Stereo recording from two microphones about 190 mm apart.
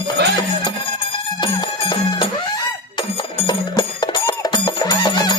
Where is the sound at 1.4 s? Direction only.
25° left (ahead or behind).